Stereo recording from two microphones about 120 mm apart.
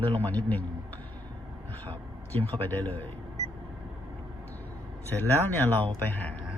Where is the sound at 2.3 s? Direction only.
15° left (ahead or behind).